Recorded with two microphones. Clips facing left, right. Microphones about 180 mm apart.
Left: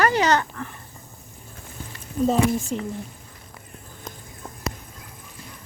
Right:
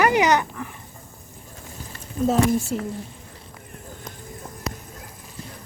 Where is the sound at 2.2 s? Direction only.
5° right (ahead or behind).